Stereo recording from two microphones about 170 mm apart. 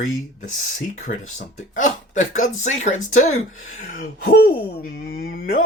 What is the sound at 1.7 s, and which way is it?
Speech, 50° left (ahead or behind).